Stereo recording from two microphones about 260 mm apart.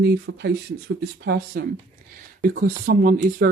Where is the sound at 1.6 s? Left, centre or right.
Right.